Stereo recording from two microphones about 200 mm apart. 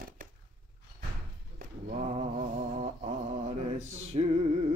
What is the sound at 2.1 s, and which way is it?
Mantra, 35° right (ahead or behind).